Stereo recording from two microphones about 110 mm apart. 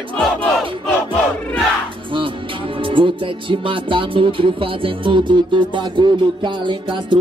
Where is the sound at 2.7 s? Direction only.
50° right (ahead or behind).